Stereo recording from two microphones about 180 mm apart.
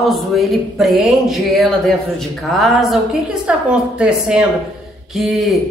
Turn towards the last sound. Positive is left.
turn(degrees=0)  # may be behind; listen again after turning